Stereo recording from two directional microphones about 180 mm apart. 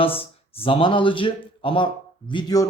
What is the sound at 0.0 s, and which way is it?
Speech, 30° left (ahead or behind).